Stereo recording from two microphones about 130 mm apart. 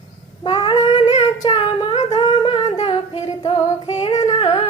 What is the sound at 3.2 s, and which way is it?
Female singing, 50° left (ahead or behind).